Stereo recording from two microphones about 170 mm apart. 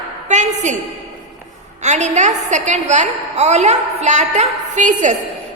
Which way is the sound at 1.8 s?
45° right (ahead or behind).